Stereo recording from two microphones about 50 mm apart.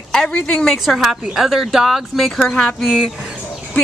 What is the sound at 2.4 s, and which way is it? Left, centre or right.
Speech, centre.